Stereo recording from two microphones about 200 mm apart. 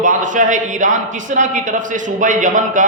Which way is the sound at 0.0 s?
40° right (ahead or behind).